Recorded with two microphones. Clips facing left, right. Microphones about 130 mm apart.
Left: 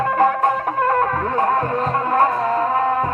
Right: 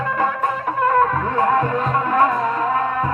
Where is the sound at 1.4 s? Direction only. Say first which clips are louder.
Right 1 dB; 35° left (ahead or behind).